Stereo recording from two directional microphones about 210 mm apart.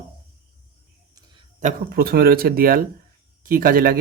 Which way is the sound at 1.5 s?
40° right (ahead or behind).